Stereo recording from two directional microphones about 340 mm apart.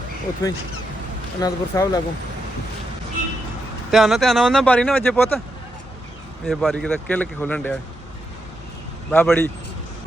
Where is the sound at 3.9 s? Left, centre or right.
Centre.